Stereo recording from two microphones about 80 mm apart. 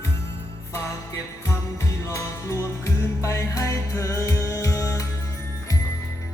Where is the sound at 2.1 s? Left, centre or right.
Left.